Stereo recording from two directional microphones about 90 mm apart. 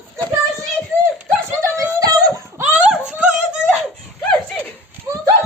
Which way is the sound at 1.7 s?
40° right (ahead or behind).